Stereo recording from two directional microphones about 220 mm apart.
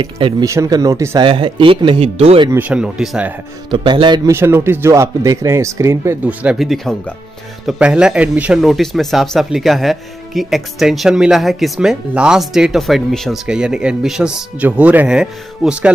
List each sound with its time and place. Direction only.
0.0 s speech: 20° right (ahead or behind)
2.5 s speech: 5° right (ahead or behind)
3.7 s a man's voice: 20° right (ahead or behind); by 15.9 s 5° right (ahead or behind)